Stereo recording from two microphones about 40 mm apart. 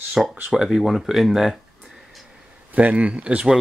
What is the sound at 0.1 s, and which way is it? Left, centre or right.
Speech, centre.